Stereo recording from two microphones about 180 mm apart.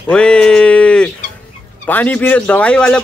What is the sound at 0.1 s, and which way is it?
Speech, 5° left (ahead or behind).